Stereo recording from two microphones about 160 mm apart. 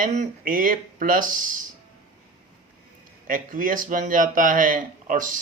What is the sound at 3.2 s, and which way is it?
Speech, 60° right (ahead or behind).